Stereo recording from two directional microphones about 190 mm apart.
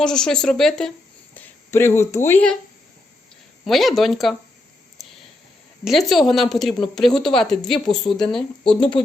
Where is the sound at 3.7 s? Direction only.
Centre (ahead or behind).